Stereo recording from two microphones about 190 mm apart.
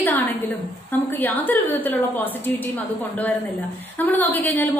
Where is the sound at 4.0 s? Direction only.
10° left (ahead or behind).